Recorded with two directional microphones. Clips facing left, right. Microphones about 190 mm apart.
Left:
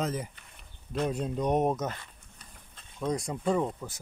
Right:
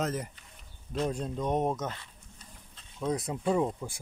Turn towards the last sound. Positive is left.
turn(degrees=-15)  # may be behind; listen again after turning